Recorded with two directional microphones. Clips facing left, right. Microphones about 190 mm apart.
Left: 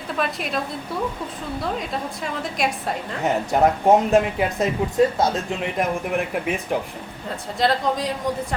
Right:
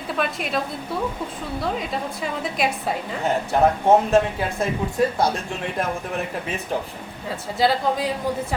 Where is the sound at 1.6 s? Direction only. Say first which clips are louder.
Right 1 dB; centre (ahead or behind).